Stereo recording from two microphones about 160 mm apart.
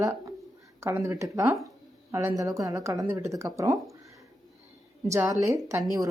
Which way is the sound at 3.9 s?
20° right (ahead or behind).